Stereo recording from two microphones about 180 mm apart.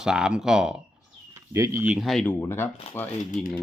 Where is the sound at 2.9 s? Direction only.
35° left (ahead or behind).